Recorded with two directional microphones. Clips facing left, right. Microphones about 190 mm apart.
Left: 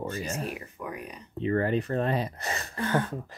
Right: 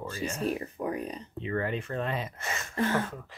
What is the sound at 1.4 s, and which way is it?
Speech, 40° left (ahead or behind).